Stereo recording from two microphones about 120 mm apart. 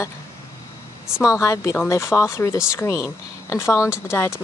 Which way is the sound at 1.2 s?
25° left (ahead or behind).